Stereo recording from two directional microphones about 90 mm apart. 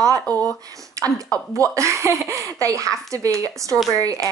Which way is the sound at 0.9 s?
40° right (ahead or behind).